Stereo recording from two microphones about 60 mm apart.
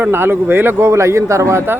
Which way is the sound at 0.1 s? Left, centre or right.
Right.